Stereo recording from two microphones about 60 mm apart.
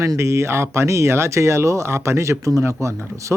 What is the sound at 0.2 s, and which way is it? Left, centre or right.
Speech, right.